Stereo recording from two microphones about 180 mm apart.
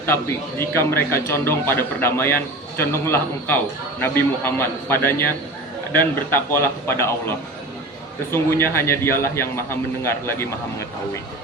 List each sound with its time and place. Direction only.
0.6 s a man's voice: 15° left (ahead or behind)